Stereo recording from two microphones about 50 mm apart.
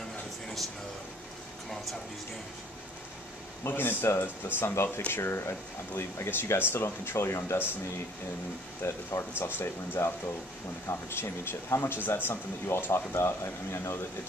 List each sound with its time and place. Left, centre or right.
3.6 s speech: left
7.5 s speech: left
8.8 s speech: left